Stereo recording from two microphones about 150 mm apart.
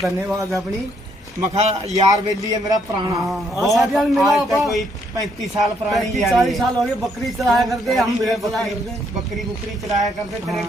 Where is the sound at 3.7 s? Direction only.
Centre (ahead or behind).